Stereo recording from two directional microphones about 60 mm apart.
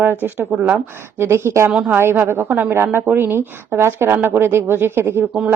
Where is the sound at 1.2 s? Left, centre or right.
Right.